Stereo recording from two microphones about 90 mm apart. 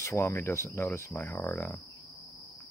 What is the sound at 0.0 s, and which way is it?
Speech, 35° left (ahead or behind).